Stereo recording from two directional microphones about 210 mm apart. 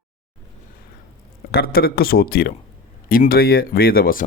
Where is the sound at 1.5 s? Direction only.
45° left (ahead or behind).